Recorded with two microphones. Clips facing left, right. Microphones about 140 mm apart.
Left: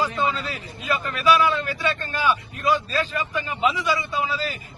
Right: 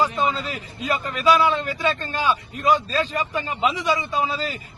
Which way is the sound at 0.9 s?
35° right (ahead or behind).